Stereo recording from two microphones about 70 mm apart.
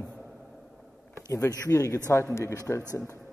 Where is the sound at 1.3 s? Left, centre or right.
Left.